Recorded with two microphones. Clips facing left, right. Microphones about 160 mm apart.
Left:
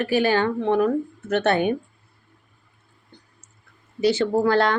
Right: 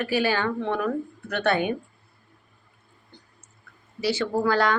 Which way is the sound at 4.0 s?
55° left (ahead or behind).